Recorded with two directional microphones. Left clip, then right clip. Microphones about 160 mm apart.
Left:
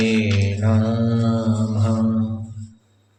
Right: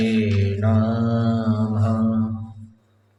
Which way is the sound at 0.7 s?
30° right (ahead or behind).